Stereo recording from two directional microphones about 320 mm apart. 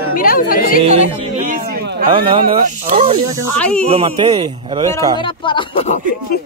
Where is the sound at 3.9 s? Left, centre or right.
Centre.